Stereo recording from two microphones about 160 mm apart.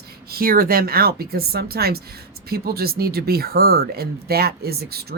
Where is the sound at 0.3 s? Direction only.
65° right (ahead or behind).